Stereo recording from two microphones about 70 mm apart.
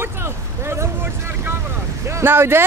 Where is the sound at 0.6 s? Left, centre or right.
Right.